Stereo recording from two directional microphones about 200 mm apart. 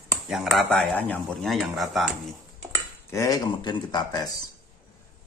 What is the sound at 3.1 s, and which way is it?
Speech, 15° left (ahead or behind).